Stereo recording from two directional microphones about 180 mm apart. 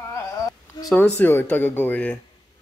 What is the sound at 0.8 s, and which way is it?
Speech, 5° left (ahead or behind).